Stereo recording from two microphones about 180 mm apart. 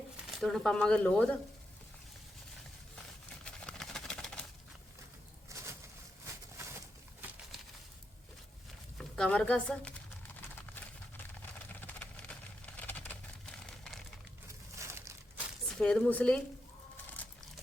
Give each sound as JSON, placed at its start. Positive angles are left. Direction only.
{"t": 0.3, "sound": "speech", "side_deg": 0}
{"t": 3.4, "sound": "a sound", "side_deg": 5}
{"t": 5.5, "sound": "pigeon", "side_deg": -15}
{"t": 9.0, "sound": "speech", "side_deg": 5}
{"t": 10.7, "sound": "clip-clop", "side_deg": 10}
{"t": 11.7, "sound": "a sound", "side_deg": 10}
{"t": 14.4, "sound": "crumpling", "side_deg": -15}
{"t": 15.6, "sound": "speech", "side_deg": 5}